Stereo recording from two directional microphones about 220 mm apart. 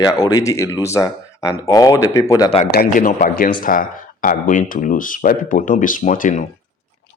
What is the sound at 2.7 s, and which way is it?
Speech, 40° left (ahead or behind).